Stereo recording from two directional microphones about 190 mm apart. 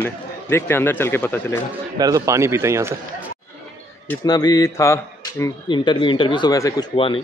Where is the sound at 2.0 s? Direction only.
20° right (ahead or behind).